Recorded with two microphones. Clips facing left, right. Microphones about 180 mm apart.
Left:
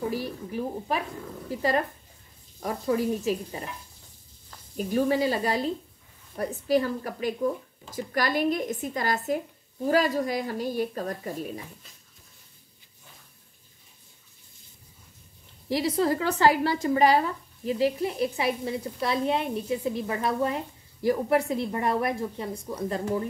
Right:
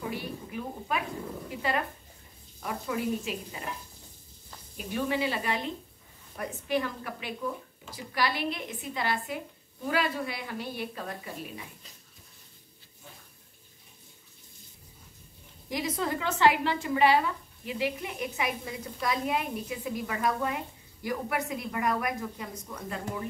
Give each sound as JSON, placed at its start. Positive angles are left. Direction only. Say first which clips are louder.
{"t": 0.0, "sound": "a woman's voice", "louder": "left 5 dB", "side_deg": 35}
{"t": 4.7, "sound": "speech", "louder": "left 6 dB", "side_deg": 40}
{"t": 15.7, "sound": "speech", "louder": "left 7 dB", "side_deg": 35}